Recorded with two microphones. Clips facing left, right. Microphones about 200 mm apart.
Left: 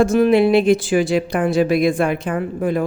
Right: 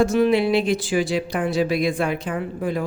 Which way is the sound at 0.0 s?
50° left (ahead or behind).